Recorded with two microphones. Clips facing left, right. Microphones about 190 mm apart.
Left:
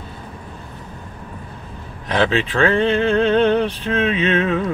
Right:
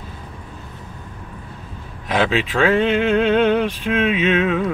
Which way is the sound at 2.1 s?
5° right (ahead or behind).